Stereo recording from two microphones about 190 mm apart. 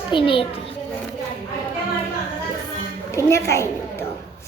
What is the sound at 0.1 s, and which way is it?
Speech, 25° left (ahead or behind).